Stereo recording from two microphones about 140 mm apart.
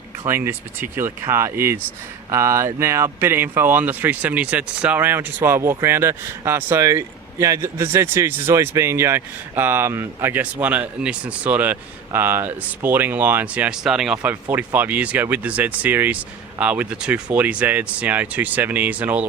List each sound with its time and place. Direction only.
0.3 s speech: 15° right (ahead or behind)